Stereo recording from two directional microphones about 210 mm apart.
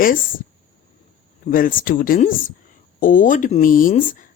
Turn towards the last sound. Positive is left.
turn(degrees=40)  # may be behind; listen again after turning